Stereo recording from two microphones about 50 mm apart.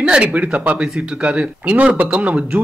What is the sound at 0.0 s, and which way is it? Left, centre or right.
Speech, centre.